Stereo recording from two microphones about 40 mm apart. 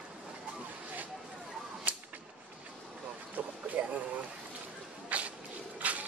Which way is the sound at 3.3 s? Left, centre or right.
Right.